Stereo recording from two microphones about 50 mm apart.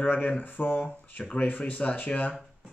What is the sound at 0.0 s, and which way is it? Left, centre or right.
Speech, left.